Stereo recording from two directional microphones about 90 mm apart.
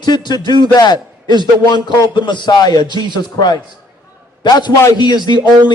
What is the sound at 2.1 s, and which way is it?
A man's voice, 60° left (ahead or behind).